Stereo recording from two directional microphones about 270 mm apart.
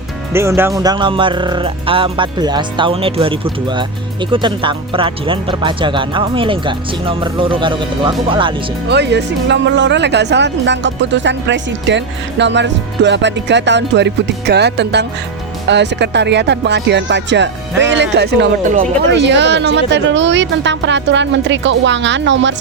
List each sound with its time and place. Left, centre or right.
0.3 s speech: centre
8.9 s speech: right